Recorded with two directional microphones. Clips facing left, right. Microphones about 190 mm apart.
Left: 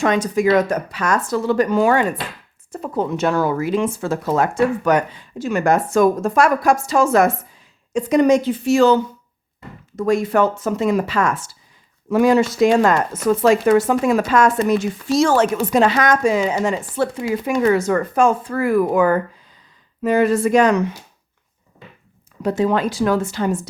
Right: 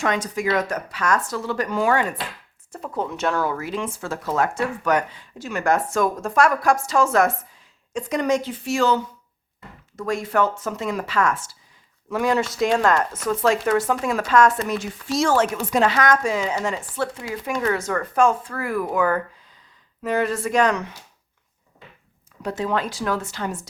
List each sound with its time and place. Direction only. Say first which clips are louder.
0.0 s speech: left 7 dB; 25° left (ahead or behind)
2.8 s speech: left 5 dB; 5° left (ahead or behind); by 9.0 s 25° left (ahead or behind)
10.1 s speech: left 5 dB; 15° left (ahead or behind)
12.1 s speech: left 7 dB; 5° left (ahead or behind)
22.4 s speech: left 6 dB; 15° left (ahead or behind)